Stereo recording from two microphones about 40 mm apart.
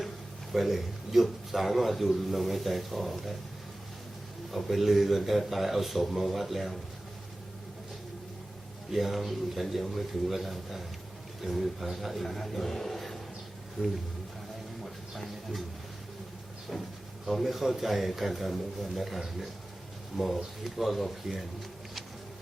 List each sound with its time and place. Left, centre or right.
0.5 s a man's voice: centre
4.5 s a man's voice: centre
8.9 s a man's voice: centre
13.8 s speech: centre
15.1 s a sound: centre
16.7 s a man's voice: centre